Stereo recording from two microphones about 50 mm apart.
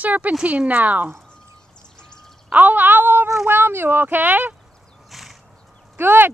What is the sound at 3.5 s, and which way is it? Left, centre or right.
Speech, right.